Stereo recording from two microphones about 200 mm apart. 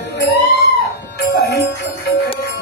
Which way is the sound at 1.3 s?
60° left (ahead or behind).